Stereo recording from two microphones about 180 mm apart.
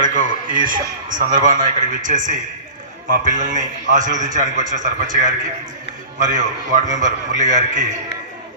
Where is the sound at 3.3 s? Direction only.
45° right (ahead or behind).